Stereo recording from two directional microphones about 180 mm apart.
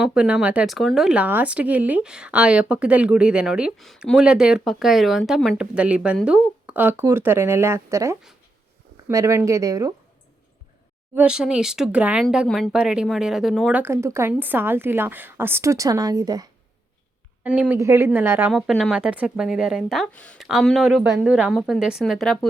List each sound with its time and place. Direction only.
0.0 s a woman's voice: 5° right (ahead or behind)
11.1 s speech: 5° right (ahead or behind)
13.8 s a woman's voice: 15° right (ahead or behind)
17.4 s a woman's voice: 5° right (ahead or behind)